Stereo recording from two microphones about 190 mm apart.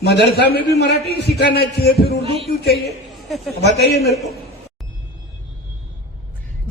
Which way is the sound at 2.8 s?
Centre (ahead or behind).